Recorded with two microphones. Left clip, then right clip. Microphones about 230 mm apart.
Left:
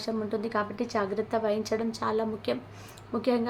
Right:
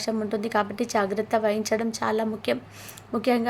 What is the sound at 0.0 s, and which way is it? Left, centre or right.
A woman's voice, centre.